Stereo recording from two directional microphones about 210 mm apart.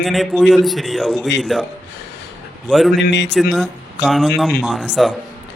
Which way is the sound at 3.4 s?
Centre (ahead or behind).